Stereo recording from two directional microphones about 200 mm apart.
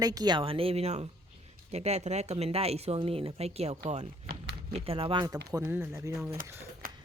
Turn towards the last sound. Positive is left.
turn(degrees=-45)  # may be behind; listen again after turning